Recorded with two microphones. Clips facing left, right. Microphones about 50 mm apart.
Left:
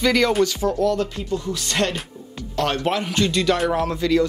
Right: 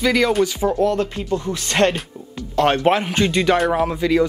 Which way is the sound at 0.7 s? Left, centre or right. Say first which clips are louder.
Right 2 dB; right.